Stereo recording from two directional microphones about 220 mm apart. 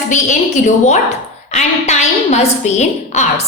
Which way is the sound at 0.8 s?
30° left (ahead or behind).